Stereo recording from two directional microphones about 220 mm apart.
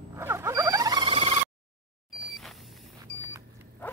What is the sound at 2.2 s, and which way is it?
Vehicle, centre (ahead or behind).